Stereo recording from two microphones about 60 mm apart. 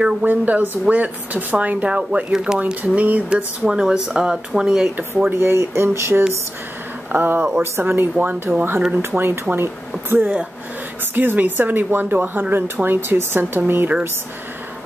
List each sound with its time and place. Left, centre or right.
0.2 s speech: right; by 2.6 s centre
2.6 s speech: right
5.3 s speech: right
7.1 s speech: right